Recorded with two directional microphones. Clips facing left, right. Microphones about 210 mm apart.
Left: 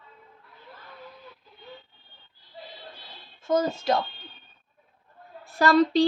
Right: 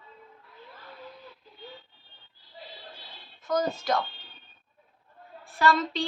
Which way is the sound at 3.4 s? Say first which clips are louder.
Left 3 dB; 25° left (ahead or behind).